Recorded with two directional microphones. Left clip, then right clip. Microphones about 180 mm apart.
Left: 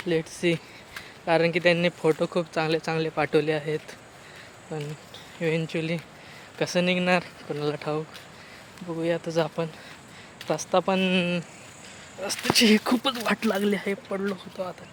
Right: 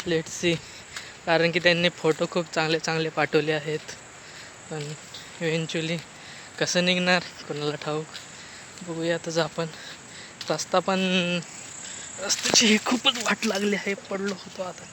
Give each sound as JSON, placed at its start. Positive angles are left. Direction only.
{"t": 0.1, "sound": "speech", "side_deg": 0}
{"t": 12.5, "sound": "speech", "side_deg": 25}
{"t": 13.5, "sound": "speech", "side_deg": 15}